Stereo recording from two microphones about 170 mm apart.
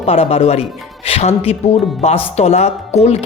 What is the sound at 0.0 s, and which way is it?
Speech, 35° left (ahead or behind).